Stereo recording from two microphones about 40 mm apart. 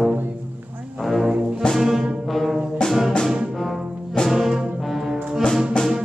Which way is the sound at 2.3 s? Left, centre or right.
Centre.